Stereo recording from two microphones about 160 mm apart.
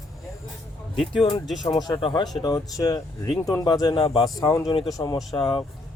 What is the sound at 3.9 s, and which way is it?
Speech, 35° left (ahead or behind).